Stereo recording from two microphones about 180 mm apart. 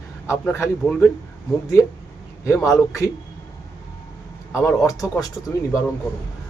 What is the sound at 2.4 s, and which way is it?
Speech, 15° left (ahead or behind).